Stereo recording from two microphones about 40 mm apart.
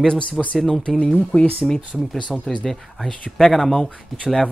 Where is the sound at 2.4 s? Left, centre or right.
Centre.